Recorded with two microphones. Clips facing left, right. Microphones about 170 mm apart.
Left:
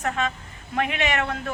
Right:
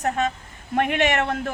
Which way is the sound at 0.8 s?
55° right (ahead or behind).